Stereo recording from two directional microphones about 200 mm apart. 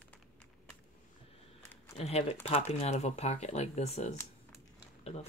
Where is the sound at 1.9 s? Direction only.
30° left (ahead or behind).